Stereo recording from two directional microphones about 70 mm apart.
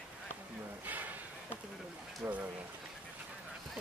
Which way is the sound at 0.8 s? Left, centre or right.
Right.